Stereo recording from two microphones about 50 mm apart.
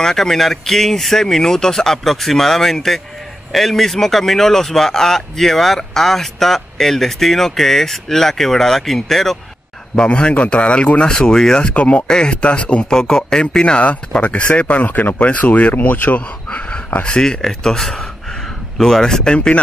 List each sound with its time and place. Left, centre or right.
0.0 s speech: centre
9.9 s speech: left